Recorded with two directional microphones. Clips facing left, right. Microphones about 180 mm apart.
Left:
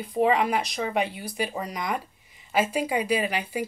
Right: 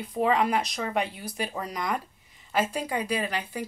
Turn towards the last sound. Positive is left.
turn(degrees=10)  # may be behind; listen again after turning